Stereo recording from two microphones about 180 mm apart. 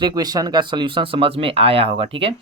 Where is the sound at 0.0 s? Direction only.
20° right (ahead or behind).